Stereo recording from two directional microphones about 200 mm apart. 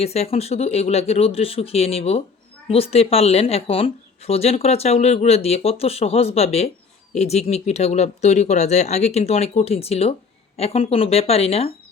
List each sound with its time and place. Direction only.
0.0 s speech: 30° left (ahead or behind)